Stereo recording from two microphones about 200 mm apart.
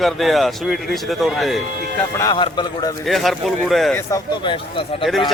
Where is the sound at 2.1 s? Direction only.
20° left (ahead or behind).